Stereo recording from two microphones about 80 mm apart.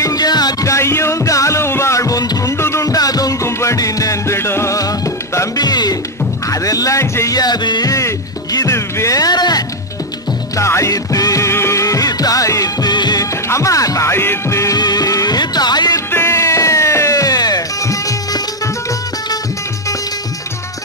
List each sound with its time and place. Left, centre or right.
0.0 s music: left
0.7 s music: left
4.7 s music: left
5.6 s music: left
7.3 s music: left
8.5 s music: left
10.6 s music: left
13.2 s music: left
14.1 s music: left
14.8 s music: left
16.1 s music: left